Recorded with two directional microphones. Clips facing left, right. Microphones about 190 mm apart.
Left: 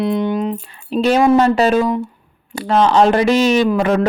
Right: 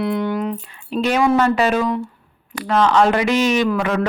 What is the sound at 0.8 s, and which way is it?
A woman's voice, 35° left (ahead or behind).